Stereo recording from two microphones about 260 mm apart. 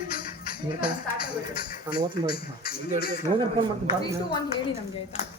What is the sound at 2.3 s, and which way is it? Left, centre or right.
Speech, left.